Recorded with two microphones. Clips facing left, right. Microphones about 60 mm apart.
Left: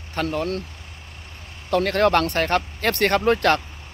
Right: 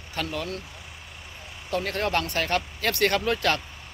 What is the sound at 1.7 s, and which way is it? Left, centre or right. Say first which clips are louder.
Speech: left 8 dB; left.